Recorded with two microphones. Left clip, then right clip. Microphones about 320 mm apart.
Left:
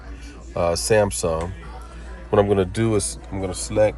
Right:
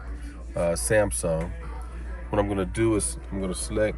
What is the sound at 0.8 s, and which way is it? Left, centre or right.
Speech, left.